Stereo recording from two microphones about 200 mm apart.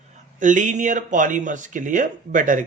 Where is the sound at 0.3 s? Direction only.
40° right (ahead or behind).